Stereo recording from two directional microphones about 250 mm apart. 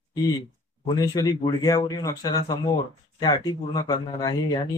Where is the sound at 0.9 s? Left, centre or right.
Centre.